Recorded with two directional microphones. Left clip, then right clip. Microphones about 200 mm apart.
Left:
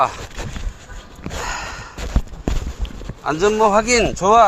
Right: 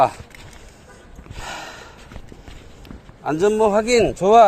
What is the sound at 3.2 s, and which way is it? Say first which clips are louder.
A man's voice: left 2 dB; 35° right (ahead or behind).